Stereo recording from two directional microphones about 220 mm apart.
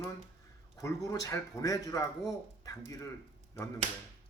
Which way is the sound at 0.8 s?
15° left (ahead or behind).